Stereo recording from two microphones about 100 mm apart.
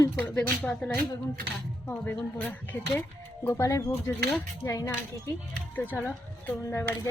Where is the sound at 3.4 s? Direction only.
30° left (ahead or behind).